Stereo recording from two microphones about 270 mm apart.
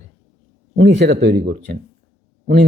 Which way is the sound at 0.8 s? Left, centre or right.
Right.